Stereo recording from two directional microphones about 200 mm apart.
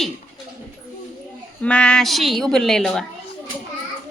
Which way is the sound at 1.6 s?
5° left (ahead or behind).